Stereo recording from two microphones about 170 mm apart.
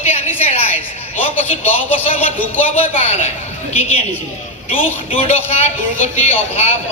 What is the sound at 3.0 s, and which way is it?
Speech, 40° left (ahead or behind).